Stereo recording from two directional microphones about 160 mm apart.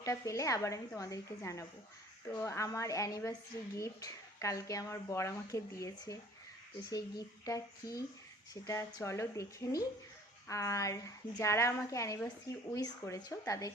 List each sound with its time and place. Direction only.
0.0 s a woman's voice: 20° left (ahead or behind)